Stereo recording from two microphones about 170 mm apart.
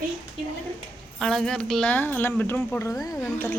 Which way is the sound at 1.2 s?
5° left (ahead or behind).